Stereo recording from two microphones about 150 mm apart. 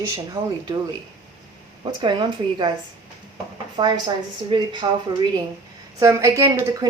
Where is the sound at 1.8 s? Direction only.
30° right (ahead or behind).